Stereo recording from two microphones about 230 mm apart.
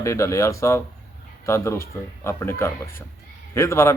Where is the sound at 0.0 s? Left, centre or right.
Centre.